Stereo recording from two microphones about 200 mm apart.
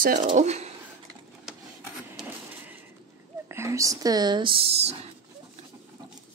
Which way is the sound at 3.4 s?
15° right (ahead or behind).